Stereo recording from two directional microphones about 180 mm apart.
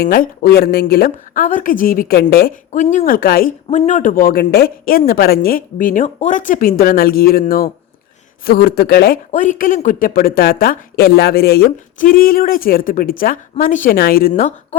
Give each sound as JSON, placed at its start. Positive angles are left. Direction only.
{"t": 0.0, "sound": "speech", "side_deg": 55}
{"t": 2.7, "sound": "a woman's voice", "side_deg": 40}
{"t": 3.7, "sound": "a woman's voice", "side_deg": 40}
{"t": 9.3, "sound": "a woman's voice", "side_deg": 45}